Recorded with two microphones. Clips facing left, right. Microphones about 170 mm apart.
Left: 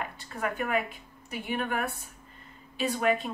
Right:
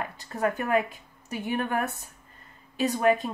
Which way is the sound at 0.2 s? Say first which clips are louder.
Right 5 dB; 40° right (ahead or behind).